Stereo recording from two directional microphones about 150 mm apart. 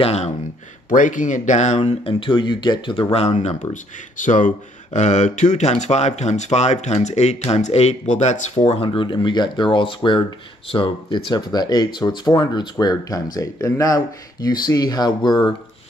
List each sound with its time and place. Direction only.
0.0 s speech: 45° left (ahead or behind)
0.8 s speech: 60° left (ahead or behind)
1.9 s speech: 35° left (ahead or behind)